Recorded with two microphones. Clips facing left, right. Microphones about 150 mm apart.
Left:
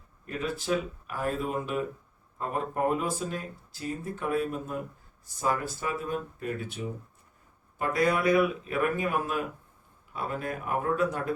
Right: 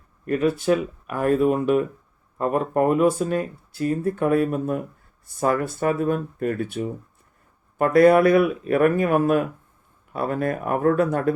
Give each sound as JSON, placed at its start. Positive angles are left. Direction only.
{"t": 0.3, "sound": "speech", "side_deg": -60}